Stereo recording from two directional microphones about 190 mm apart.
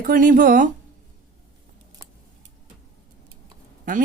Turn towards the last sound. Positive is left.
turn(degrees=-45)  # may be behind; listen again after turning